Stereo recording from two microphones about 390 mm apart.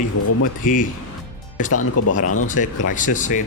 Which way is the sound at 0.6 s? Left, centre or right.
Left.